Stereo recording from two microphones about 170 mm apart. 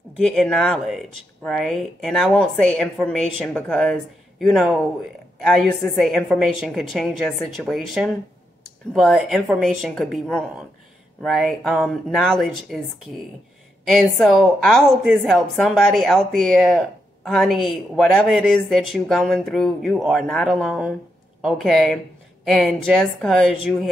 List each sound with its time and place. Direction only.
0.2 s speech: centre (ahead or behind)
13.8 s speech: centre (ahead or behind)